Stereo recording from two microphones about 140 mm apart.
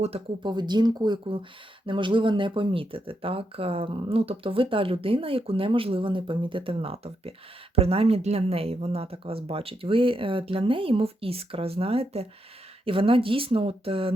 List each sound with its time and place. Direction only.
0.4 s speech: 30° right (ahead or behind)